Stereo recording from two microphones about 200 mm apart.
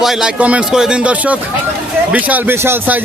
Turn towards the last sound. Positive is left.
turn(degrees=-10)  # may be behind; listen again after turning